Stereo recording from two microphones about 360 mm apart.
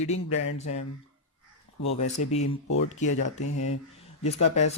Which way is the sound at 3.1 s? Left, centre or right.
Left.